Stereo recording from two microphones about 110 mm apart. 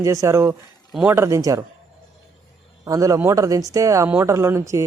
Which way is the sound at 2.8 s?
30° right (ahead or behind).